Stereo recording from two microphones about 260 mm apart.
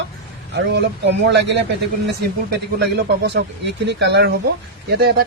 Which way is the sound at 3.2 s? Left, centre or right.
Right.